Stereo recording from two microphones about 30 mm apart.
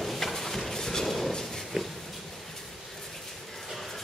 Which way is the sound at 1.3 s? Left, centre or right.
Centre.